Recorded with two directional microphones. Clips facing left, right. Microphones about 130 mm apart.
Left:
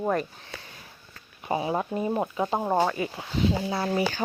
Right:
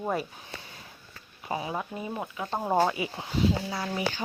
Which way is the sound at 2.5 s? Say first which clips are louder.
Right 1 dB; 10° left (ahead or behind).